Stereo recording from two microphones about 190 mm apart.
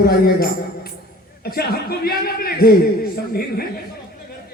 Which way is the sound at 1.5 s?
55° left (ahead or behind).